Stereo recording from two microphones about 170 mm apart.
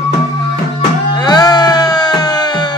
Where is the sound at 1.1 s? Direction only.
25° left (ahead or behind).